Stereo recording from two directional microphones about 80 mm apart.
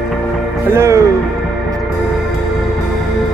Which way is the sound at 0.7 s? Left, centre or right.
Right.